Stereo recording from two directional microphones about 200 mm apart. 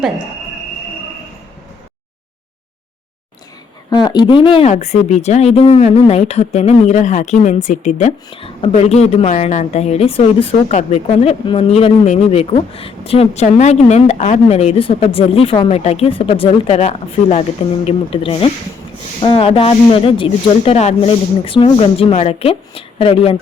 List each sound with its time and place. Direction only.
3.8 s speech: 20° left (ahead or behind)